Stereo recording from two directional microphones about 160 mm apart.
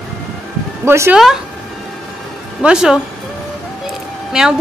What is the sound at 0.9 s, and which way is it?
Speech, 15° right (ahead or behind).